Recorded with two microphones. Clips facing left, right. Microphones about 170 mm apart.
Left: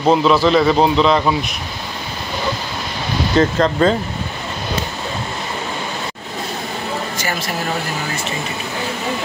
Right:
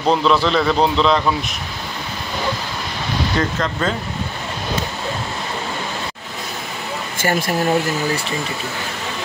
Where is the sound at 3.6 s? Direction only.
35° left (ahead or behind).